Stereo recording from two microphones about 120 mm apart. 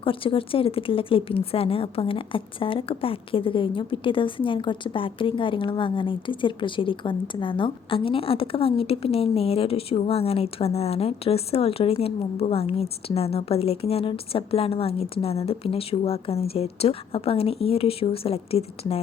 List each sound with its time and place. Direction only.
0.0 s speech: 45° left (ahead or behind)